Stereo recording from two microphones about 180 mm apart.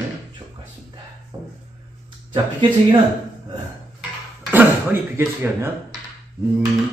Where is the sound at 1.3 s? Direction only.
25° right (ahead or behind).